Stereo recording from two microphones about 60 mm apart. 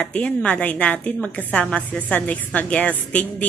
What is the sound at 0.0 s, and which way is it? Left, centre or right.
A woman's voice, centre.